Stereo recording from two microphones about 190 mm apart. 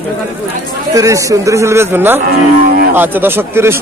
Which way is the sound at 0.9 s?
15° right (ahead or behind).